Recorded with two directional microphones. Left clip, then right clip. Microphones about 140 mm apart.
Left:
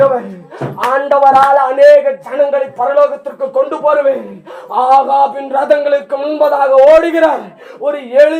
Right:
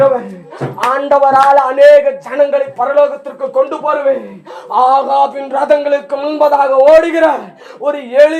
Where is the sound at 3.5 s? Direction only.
25° right (ahead or behind).